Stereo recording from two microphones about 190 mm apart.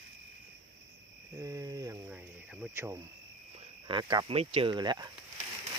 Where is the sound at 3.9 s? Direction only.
25° right (ahead or behind).